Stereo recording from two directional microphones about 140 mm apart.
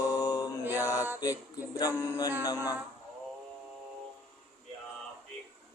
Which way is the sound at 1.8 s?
25° left (ahead or behind).